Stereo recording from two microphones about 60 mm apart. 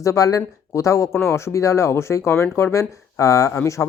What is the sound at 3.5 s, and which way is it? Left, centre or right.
Speech, left.